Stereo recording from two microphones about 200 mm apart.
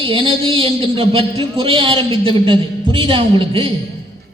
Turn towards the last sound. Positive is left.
turn(degrees=-25)  # may be behind; listen again after turning